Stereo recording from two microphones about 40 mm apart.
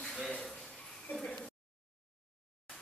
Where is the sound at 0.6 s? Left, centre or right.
Centre.